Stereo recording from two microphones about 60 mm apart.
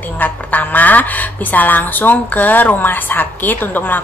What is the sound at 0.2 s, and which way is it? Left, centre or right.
Speech, left.